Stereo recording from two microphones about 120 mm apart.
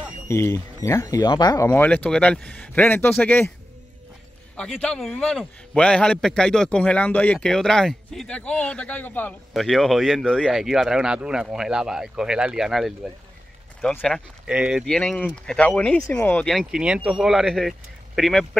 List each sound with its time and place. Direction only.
0.3 s speech: 25° left (ahead or behind)
1.7 s a man's voice: 15° left (ahead or behind)
4.6 s a man's voice: 5° left (ahead or behind)
9.5 s speech: centre (ahead or behind)
14.0 s speech: 5° left (ahead or behind)
14.5 s speech: 5° right (ahead or behind)
14.9 s a man's voice: 5° left (ahead or behind)
16.5 s speech: 5° right (ahead or behind)